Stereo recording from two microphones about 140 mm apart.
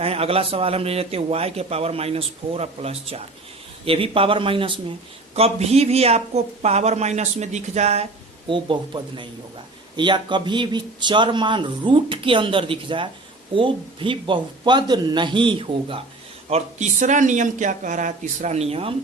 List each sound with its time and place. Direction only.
0.0 s a man's voice: 45° right (ahead or behind)
8.4 s a man's voice: 35° right (ahead or behind)
16.5 s a man's voice: 55° right (ahead or behind)